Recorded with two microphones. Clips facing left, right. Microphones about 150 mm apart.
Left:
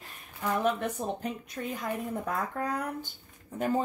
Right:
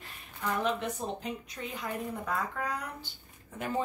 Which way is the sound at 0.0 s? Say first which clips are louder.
Left 2 dB; 45° left (ahead or behind).